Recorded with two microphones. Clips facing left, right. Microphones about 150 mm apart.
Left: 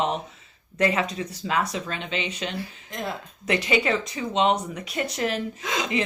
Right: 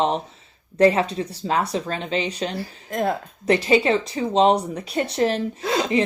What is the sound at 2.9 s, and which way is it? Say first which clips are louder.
Speech: right 9 dB; 55° right (ahead or behind).